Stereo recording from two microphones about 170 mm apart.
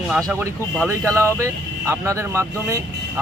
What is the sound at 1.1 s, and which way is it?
A man's voice, 15° right (ahead or behind).